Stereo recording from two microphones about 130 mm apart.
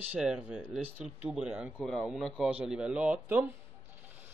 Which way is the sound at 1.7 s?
5° left (ahead or behind).